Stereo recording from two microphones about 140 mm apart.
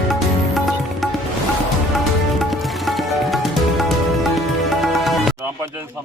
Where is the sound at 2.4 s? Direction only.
Centre (ahead or behind).